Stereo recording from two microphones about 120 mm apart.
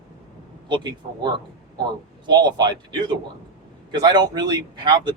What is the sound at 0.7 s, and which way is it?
Speech, 40° right (ahead or behind).